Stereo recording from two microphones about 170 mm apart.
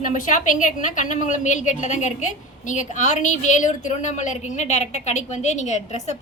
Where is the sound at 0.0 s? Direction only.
50° left (ahead or behind).